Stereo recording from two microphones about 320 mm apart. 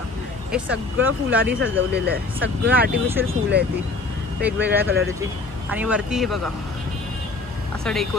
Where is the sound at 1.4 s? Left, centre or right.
Right.